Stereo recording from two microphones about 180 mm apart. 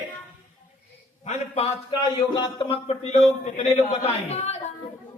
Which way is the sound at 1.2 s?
40° left (ahead or behind).